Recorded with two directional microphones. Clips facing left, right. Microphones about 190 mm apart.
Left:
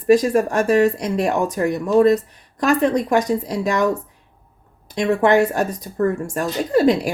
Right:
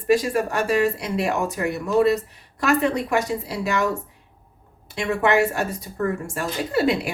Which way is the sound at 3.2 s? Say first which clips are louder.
Left 5 dB; 5° right (ahead or behind).